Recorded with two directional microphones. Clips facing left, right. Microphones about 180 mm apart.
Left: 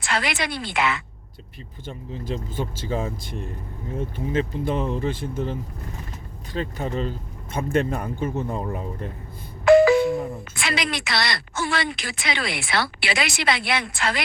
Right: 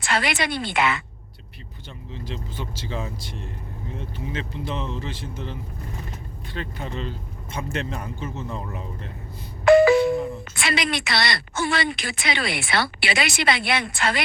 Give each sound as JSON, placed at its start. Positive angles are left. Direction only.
{"t": 0.0, "sound": "a woman's voice", "side_deg": 0}
{"t": 1.9, "sound": "speech", "side_deg": 45}
{"t": 9.6, "sound": "doorbell", "side_deg": 0}
{"t": 10.5, "sound": "a woman's voice", "side_deg": 0}